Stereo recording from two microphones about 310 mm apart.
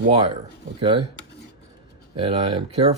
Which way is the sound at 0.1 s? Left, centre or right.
Centre.